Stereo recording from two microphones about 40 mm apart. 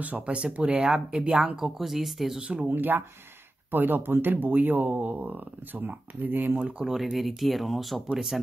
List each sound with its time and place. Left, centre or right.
0.2 s speech: right
1.3 s speech: right
1.6 s speech: centre
2.4 s speech: right
2.7 s speech: right
6.6 s speech: centre
7.0 s speech: centre
8.1 s speech: centre